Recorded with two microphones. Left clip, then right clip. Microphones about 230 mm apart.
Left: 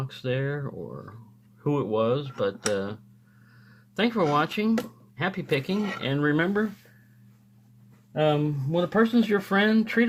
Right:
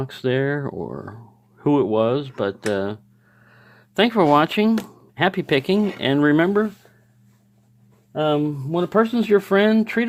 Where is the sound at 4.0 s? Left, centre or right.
Right.